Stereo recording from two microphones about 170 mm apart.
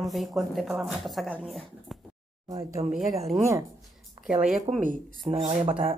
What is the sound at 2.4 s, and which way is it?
Speech, 20° right (ahead or behind).